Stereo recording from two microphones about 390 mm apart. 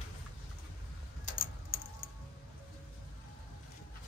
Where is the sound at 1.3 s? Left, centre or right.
Left.